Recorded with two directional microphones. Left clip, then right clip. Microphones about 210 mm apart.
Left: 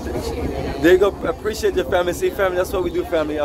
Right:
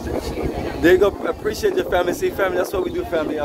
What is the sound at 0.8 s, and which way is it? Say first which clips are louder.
Speech: even; centre (ahead or behind).